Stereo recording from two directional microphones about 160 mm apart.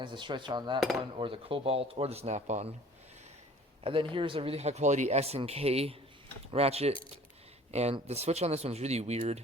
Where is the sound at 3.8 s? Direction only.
35° right (ahead or behind).